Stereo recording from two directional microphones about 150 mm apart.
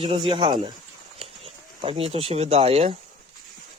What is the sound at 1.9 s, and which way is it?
Speech, 45° right (ahead or behind).